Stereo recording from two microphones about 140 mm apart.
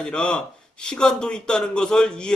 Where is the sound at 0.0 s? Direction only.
5° left (ahead or behind).